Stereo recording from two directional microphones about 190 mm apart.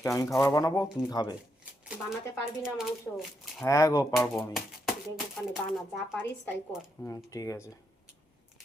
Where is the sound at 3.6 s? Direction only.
15° left (ahead or behind).